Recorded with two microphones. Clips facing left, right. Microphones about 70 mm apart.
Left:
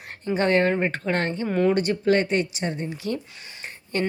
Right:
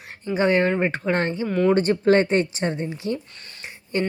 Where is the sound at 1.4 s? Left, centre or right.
Centre.